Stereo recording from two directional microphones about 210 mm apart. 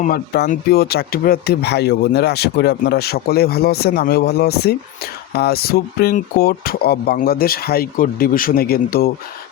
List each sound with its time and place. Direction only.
0.0 s speech: 40° left (ahead or behind)